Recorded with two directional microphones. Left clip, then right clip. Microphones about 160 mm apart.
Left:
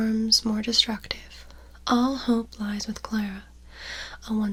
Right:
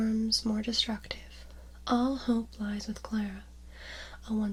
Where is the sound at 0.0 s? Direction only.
25° left (ahead or behind).